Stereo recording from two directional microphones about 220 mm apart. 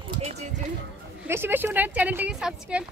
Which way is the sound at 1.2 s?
10° right (ahead or behind).